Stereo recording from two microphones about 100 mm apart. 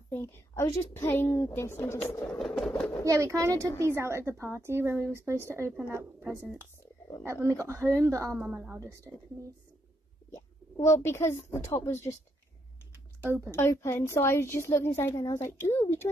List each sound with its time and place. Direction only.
0.1 s a woman's voice: 25° left (ahead or behind)
2.2 s a sound: 5° left (ahead or behind)
3.1 s speech: 30° right (ahead or behind)
8.4 s a woman's voice: 15° right (ahead or behind)
8.7 s speech: 30° right (ahead or behind)
10.3 s speech: 25° left (ahead or behind)
13.2 s a woman's voice: 20° right (ahead or behind)
13.5 s a woman's voice: 25° left (ahead or behind)